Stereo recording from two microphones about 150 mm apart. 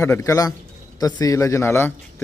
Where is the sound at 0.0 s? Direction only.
20° left (ahead or behind).